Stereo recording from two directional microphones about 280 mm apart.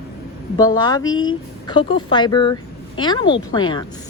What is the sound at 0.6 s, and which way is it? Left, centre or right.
Speech, centre.